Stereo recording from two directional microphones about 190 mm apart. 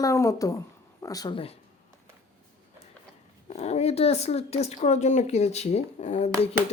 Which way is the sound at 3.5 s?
35° left (ahead or behind).